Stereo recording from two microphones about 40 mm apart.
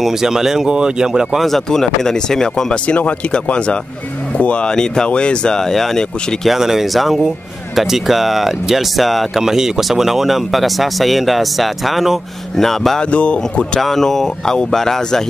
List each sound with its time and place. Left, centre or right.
0.0 s speech: centre
0.7 s speech: right
1.7 s speech: centre
2.9 s speech: left
5.6 s speech: centre
6.5 s speech: centre
9.4 s speech: centre
13.0 s speech: left
13.7 s speech: centre